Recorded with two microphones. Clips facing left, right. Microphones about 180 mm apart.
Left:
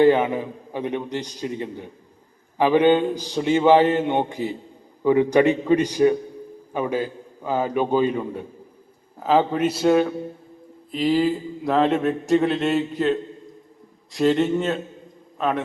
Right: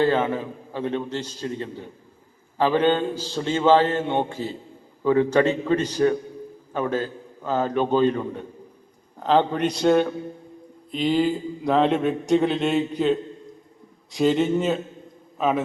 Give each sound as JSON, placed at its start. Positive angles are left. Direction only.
{"t": 0.0, "sound": "a man's voice", "side_deg": 15}